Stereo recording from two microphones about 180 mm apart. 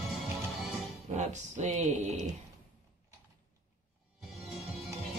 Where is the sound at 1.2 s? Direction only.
40° right (ahead or behind).